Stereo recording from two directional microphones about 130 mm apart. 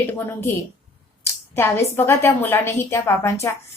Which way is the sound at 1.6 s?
20° left (ahead or behind).